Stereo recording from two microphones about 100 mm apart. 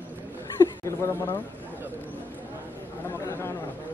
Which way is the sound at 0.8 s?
25° left (ahead or behind).